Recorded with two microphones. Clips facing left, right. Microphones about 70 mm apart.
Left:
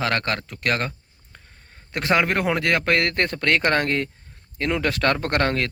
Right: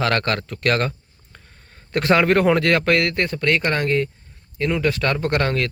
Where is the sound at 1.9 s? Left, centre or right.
Centre.